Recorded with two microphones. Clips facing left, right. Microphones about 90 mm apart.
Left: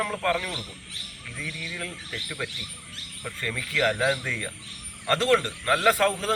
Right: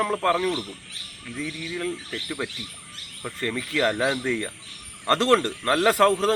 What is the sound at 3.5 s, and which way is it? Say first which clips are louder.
Speech: right 1 dB; 20° right (ahead or behind).